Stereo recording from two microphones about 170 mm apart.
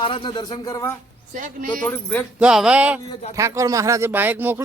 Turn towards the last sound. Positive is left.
turn(degrees=-10)  # may be behind; listen again after turning